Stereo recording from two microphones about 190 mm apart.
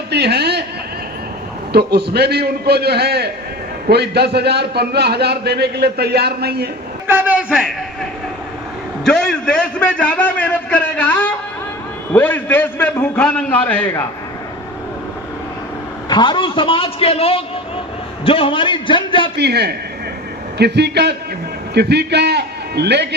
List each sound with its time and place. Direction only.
0.1 s a sound: 60° right (ahead or behind)
1.7 s a man's voice: 55° right (ahead or behind)
7.1 s a man's voice: 10° right (ahead or behind)
9.0 s a man's voice: 5° left (ahead or behind)
16.0 s a man's voice: 25° left (ahead or behind)
19.4 s a man's voice: 60° right (ahead or behind)